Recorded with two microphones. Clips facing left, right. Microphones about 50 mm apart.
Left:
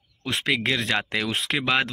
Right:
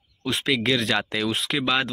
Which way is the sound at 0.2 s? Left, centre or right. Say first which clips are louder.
Right 1 dB; left.